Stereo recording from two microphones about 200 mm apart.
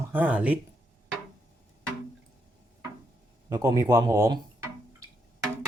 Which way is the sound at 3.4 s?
20° right (ahead or behind).